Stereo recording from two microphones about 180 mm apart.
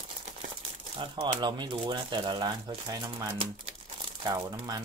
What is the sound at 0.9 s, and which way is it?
Speech, 25° right (ahead or behind).